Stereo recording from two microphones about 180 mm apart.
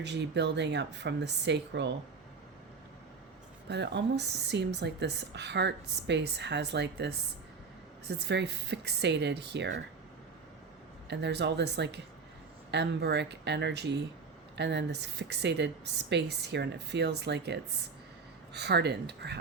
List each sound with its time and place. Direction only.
0.0 s speech: 75° right (ahead or behind)
3.7 s speech: 70° right (ahead or behind)
11.1 s speech: 70° right (ahead or behind)